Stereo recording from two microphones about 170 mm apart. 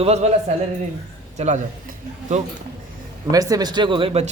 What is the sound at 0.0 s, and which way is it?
Speech, 40° right (ahead or behind).